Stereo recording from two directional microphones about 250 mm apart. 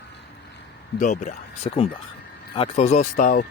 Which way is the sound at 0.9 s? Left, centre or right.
Left.